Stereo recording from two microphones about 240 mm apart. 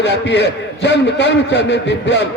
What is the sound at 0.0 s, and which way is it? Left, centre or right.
A man's voice, left.